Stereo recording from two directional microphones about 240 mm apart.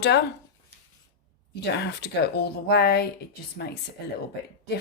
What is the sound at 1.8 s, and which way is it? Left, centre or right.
Speech, left.